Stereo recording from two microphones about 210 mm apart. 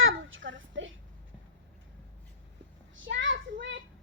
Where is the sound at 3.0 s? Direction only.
65° right (ahead or behind).